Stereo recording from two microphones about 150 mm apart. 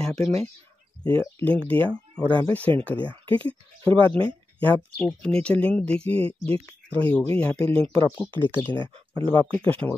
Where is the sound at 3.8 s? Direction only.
35° right (ahead or behind).